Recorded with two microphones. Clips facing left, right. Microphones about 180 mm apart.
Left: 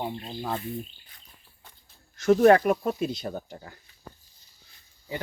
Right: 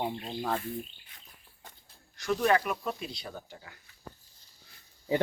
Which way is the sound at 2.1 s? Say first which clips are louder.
Left 9 dB; 45° left (ahead or behind).